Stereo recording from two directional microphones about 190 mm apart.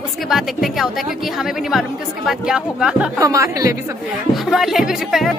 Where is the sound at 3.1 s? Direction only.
15° right (ahead or behind).